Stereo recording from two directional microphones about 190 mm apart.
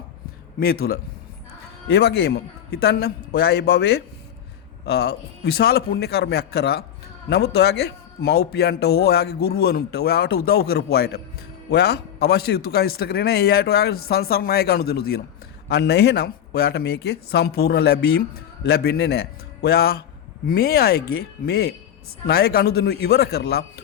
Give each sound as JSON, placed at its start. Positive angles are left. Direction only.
{"t": 0.6, "sound": "a man's voice", "side_deg": 50}